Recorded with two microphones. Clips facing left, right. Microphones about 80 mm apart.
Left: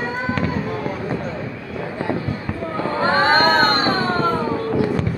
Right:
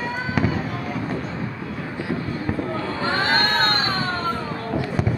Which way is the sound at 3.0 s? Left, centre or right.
Left.